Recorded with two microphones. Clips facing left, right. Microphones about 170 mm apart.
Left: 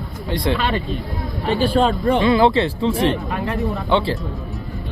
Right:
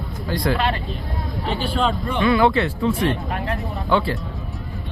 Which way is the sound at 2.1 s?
30° left (ahead or behind).